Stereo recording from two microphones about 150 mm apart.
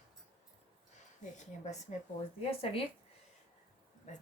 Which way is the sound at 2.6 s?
40° left (ahead or behind).